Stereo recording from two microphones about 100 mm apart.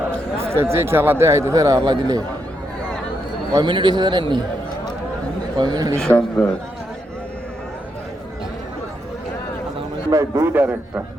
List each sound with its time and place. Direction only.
0.3 s speech: 25° right (ahead or behind); by 2.2 s 40° right (ahead or behind)
3.5 s a man's voice: 50° right (ahead or behind)
5.5 s a man's voice: 45° right (ahead or behind)
6.0 s a man's voice: 10° left (ahead or behind)
10.1 s speech: 30° right (ahead or behind)